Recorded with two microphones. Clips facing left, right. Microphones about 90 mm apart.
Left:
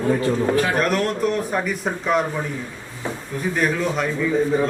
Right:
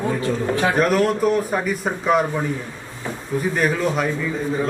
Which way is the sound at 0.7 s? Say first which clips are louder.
Right 3 dB; centre (ahead or behind).